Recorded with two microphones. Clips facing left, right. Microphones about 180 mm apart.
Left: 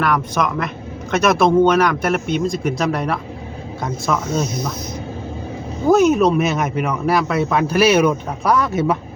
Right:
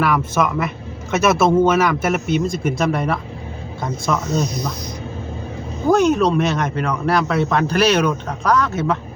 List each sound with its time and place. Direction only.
0.0 s a man's voice: 5° right (ahead or behind)
5.9 s speech: 5° left (ahead or behind)